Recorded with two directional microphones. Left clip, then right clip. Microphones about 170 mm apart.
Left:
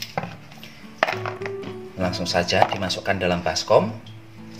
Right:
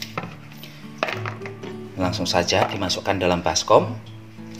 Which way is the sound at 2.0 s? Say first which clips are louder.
Right 1 dB; 35° right (ahead or behind).